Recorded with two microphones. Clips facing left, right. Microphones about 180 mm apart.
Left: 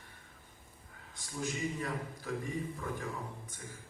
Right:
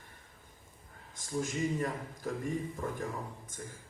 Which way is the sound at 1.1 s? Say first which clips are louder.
Right 4 dB; 45° right (ahead or behind).